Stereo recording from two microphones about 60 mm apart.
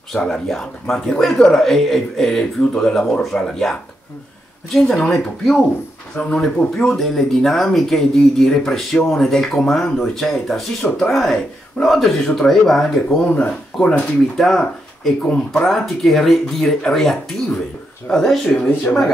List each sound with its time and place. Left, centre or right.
0.1 s speech: centre
4.9 s speech: centre
13.3 s speech: left
14.3 s speech: centre
15.2 s speech: centre
15.6 s speech: centre